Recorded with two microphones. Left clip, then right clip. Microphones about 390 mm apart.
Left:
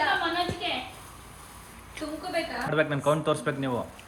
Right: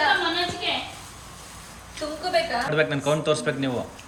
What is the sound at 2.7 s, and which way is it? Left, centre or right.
Speech, centre.